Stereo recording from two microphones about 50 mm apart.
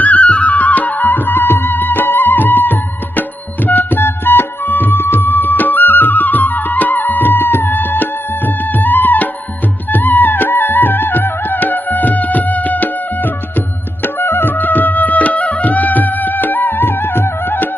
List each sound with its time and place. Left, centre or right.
0.0 s music: left